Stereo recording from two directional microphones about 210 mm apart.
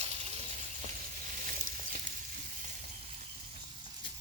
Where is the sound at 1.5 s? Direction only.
40° right (ahead or behind).